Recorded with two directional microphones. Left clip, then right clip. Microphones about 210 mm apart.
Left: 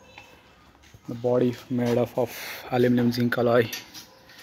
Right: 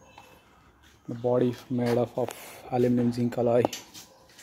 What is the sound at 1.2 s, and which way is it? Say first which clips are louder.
Speech: left 2 dB; centre (ahead or behind).